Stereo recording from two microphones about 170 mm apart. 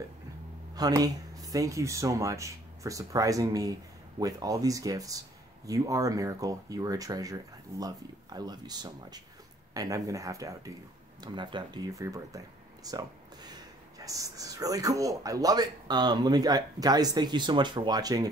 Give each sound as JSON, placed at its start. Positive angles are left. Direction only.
{"t": 0.7, "sound": "speech", "side_deg": -20}